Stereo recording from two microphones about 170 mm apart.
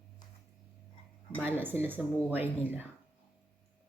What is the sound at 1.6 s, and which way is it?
Speech, 10° right (ahead or behind).